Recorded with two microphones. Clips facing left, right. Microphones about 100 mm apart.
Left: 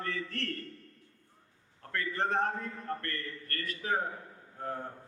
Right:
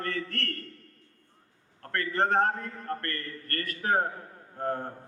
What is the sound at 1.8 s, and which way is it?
A man's voice, 60° right (ahead or behind).